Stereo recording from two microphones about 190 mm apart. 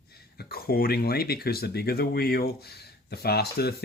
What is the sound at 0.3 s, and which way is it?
A man's voice, 55° left (ahead or behind).